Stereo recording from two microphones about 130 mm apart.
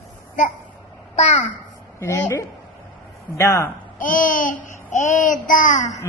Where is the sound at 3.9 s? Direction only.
90° left.